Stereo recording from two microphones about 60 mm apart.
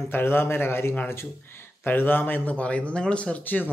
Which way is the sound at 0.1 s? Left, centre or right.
Left.